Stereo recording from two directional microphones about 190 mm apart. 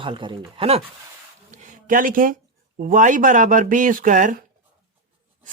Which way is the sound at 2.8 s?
45° right (ahead or behind).